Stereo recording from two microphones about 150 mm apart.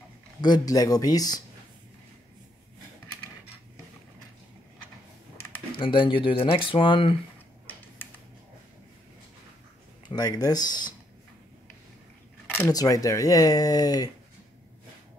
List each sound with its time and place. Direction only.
0.4 s speech: 25° left (ahead or behind)
5.8 s speech: 35° left (ahead or behind)
8.0 s a sound: 15° left (ahead or behind)
10.0 s speech: 25° left (ahead or behind)
12.7 s speech: 25° left (ahead or behind)